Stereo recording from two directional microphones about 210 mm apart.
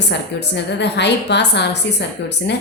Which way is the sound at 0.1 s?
55° left (ahead or behind).